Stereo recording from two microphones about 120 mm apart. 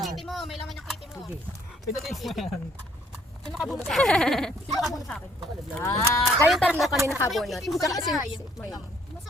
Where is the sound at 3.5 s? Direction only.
Centre (ahead or behind).